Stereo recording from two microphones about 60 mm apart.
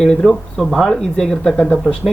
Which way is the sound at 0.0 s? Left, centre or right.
Centre.